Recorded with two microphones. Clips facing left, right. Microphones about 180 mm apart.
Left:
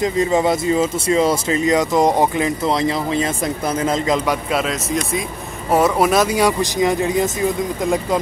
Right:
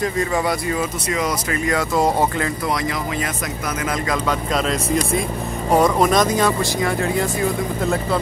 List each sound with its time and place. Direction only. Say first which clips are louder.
0.0 s speech: left 4 dB; 20° left (ahead or behind)
4.3 s speech: left 1 dB; 5° left (ahead or behind)